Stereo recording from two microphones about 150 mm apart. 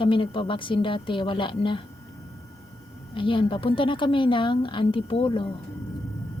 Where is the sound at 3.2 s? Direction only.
35° left (ahead or behind).